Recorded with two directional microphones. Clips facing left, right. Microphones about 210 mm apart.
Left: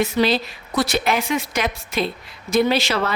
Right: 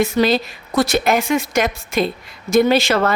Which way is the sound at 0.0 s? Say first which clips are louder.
Right 3 dB; 45° right (ahead or behind).